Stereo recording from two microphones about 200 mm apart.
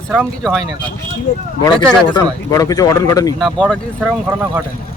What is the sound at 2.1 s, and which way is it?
Speech, 20° left (ahead or behind).